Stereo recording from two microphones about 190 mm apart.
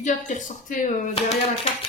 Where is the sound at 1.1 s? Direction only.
30° left (ahead or behind).